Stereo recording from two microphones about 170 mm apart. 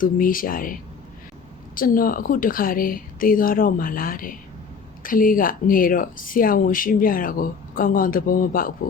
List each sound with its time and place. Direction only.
0.0 s speech: 55° left (ahead or behind)